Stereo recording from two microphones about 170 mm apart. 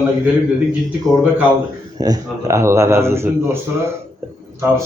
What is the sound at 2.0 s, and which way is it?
A man's voice, 20° right (ahead or behind).